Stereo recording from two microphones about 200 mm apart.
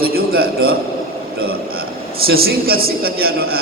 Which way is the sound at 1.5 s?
50° right (ahead or behind).